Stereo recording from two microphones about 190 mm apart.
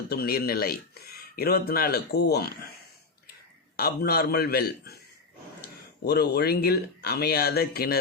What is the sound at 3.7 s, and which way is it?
Speech, 55° left (ahead or behind).